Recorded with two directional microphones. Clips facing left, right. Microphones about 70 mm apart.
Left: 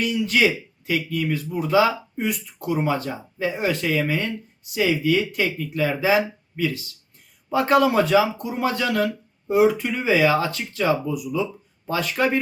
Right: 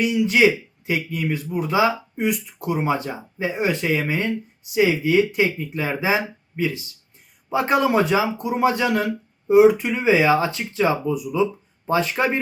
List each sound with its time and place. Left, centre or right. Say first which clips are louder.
0.0 s speech: right 3 dB; centre